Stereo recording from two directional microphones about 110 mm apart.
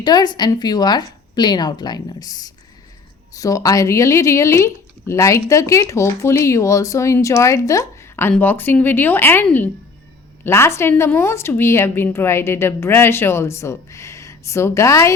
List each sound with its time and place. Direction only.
0.0 s speech: 40° left (ahead or behind)